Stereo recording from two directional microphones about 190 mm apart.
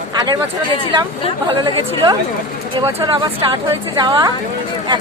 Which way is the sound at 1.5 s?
25° right (ahead or behind).